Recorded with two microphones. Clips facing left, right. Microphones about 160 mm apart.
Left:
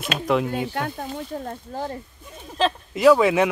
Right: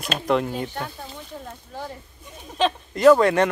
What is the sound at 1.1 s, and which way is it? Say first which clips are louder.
Speech: left 7 dB; 45° left (ahead or behind).